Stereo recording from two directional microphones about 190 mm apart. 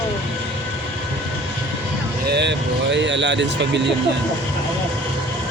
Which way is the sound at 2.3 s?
65° right (ahead or behind).